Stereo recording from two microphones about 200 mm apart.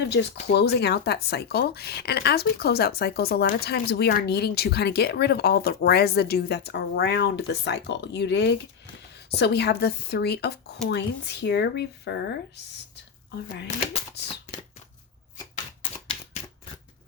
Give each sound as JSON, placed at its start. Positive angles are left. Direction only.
{"t": 0.0, "sound": "speech", "side_deg": 60}